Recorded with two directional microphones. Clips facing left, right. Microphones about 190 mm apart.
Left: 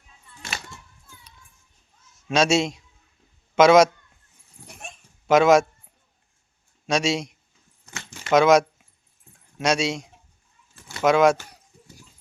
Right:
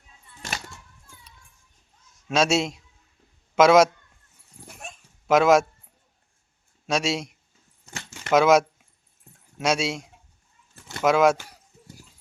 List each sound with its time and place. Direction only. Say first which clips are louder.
2.2 s a man's voice: left 2 dB; centre (ahead or behind)
5.2 s speech: left 2 dB; centre (ahead or behind)
6.8 s a man's voice: left 2 dB; 5° right (ahead or behind)
7.9 s a sound: right 1 dB; 45° right (ahead or behind)
8.3 s keys jangling: left 1 dB; 5° right (ahead or behind)
9.6 s a man's voice: left 2 dB; 5° right (ahead or behind)